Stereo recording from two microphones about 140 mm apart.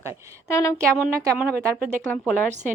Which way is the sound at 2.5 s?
60° right (ahead or behind).